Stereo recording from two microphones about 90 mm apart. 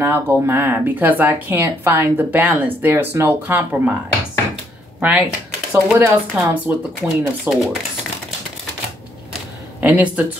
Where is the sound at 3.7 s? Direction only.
15° right (ahead or behind).